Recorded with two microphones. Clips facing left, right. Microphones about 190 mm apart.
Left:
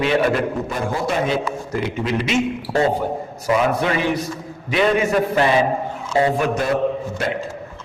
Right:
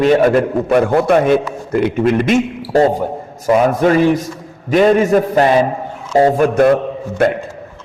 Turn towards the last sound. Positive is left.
turn(degrees=-55)  # may be behind; listen again after turning